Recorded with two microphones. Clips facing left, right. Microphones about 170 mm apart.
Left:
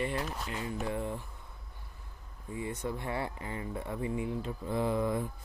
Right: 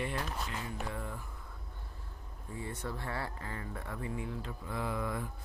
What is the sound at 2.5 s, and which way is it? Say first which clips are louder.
Speech: left 4 dB; 15° left (ahead or behind).